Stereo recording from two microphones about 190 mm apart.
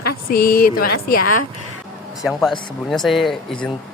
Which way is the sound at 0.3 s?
50° left (ahead or behind).